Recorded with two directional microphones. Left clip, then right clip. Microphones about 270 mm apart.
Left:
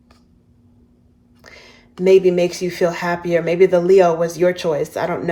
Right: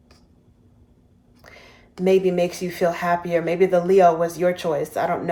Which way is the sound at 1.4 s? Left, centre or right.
Left.